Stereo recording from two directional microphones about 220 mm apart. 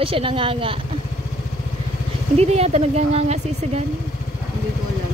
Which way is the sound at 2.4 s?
30° right (ahead or behind).